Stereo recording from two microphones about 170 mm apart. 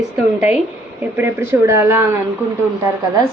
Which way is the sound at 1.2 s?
15° right (ahead or behind).